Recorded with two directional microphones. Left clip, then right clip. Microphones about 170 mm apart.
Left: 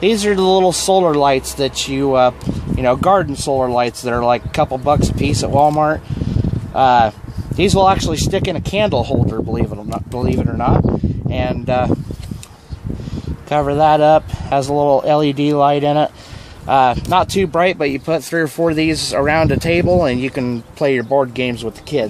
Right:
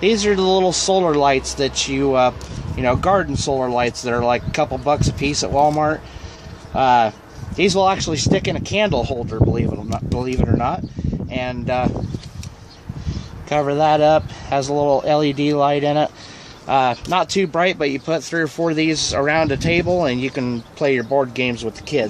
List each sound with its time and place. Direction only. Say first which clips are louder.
0.0 s speech: left 2 dB; 45° left (ahead or behind)
13.5 s speech: left 3 dB; 35° left (ahead or behind)